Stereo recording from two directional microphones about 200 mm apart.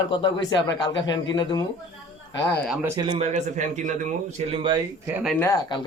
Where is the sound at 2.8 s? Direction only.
25° right (ahead or behind).